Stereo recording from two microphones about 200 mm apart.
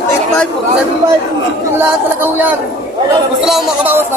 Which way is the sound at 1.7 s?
10° right (ahead or behind).